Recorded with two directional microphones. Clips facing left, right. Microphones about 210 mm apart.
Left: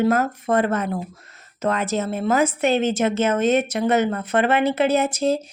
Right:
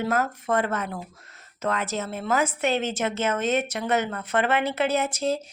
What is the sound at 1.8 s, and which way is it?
A woman's voice, 20° left (ahead or behind).